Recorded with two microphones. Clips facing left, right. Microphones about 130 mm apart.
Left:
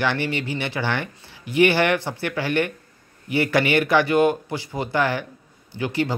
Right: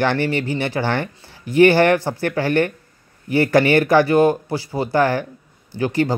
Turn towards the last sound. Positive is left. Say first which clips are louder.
# right 5 dB
turn(degrees=-45)  # may be behind; listen again after turning